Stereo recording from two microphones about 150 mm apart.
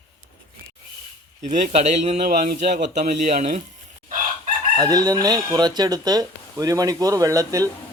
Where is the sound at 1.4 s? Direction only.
55° right (ahead or behind).